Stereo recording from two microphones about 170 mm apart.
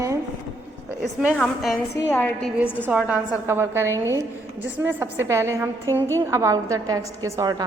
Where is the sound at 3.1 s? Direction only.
10° right (ahead or behind).